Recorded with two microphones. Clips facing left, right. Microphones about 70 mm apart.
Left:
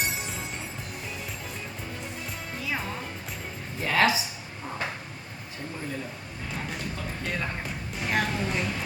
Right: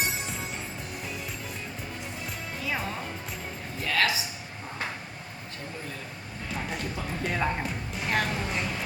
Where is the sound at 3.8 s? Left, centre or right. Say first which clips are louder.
Left 4 dB; left.